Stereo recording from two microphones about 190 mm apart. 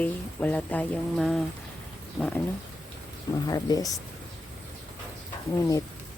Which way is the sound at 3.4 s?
20° left (ahead or behind).